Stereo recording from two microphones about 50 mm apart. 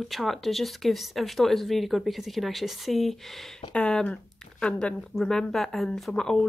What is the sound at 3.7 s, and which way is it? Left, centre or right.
Speech, left.